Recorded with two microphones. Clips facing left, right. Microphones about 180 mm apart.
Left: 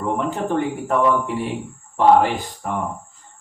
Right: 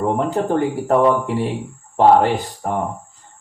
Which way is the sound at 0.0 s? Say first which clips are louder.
Right 4 dB; 40° right (ahead or behind).